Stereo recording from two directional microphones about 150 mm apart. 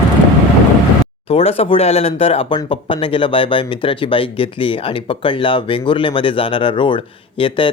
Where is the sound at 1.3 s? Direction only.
40° left (ahead or behind).